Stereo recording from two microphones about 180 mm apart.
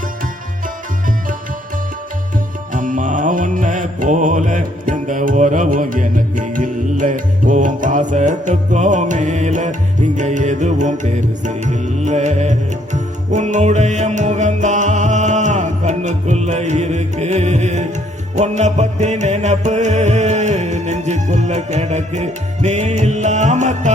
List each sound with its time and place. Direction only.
2.7 s music: 45° right (ahead or behind)